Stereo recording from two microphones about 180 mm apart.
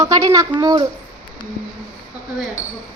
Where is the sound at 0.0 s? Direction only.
15° right (ahead or behind).